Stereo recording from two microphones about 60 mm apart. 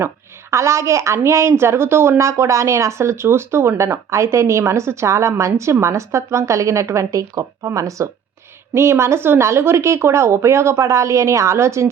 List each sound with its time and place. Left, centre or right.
0.5 s a woman's voice: right
8.7 s a woman's voice: right